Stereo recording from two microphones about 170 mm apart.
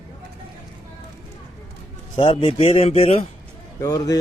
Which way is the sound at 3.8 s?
20° left (ahead or behind).